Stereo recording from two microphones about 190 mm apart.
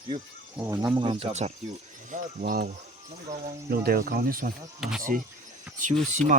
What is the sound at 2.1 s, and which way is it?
Speech, 50° right (ahead or behind).